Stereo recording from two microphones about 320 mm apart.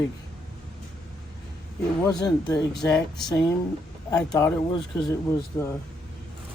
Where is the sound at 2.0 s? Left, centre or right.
Centre.